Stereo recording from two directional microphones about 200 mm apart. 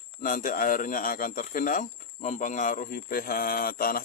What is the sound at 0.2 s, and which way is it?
Speech, 40° left (ahead or behind).